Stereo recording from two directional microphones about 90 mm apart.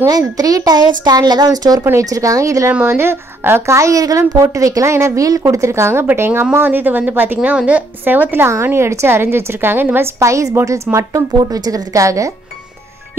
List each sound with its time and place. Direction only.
0.0 s a woman's voice: 40° right (ahead or behind)
2.7 s a woman's voice: 25° right (ahead or behind)